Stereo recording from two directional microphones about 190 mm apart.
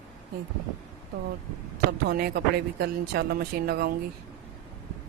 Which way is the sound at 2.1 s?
55° right (ahead or behind).